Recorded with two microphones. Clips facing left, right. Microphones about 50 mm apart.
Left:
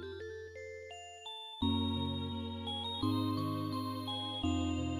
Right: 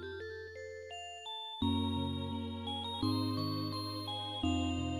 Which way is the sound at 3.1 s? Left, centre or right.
Left.